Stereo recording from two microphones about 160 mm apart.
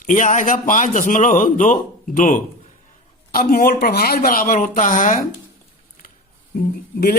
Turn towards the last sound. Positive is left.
turn(degrees=70)  # may be behind; listen again after turning